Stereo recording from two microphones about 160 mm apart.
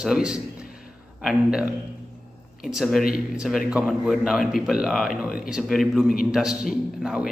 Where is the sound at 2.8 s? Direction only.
Centre (ahead or behind).